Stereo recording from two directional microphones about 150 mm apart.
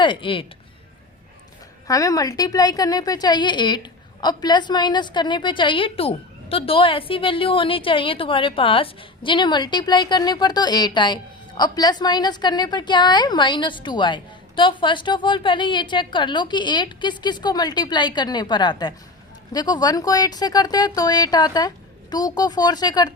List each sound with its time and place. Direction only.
0.0 s speech: 35° left (ahead or behind)
1.9 s a woman's voice: 25° left (ahead or behind)